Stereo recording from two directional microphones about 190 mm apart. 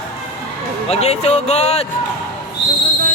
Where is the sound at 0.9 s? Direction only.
35° left (ahead or behind).